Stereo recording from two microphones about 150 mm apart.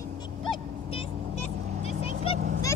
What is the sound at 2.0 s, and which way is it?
Vehicle, 40° left (ahead or behind).